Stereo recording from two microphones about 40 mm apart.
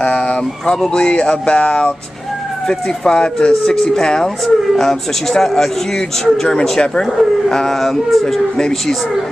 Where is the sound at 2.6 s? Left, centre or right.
Centre.